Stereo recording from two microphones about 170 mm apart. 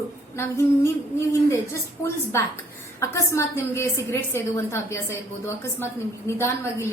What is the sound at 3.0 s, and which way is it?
A woman's voice, 15° left (ahead or behind).